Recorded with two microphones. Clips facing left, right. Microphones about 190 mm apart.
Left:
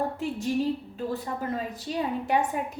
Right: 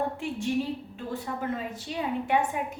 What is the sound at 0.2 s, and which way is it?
Speech, 40° left (ahead or behind).